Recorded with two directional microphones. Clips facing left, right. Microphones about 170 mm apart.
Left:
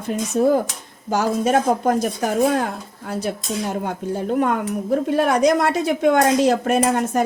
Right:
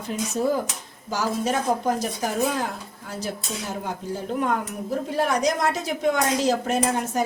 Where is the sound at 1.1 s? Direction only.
55° left (ahead or behind).